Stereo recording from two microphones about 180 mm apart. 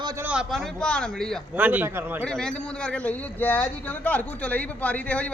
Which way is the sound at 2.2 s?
5° left (ahead or behind).